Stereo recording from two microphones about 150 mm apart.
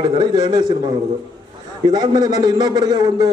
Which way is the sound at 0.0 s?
30° right (ahead or behind).